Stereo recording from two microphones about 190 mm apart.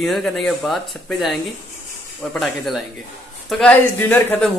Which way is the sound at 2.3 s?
Centre (ahead or behind).